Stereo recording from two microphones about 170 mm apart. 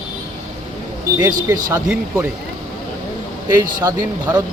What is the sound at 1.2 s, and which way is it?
Speech, 20° right (ahead or behind).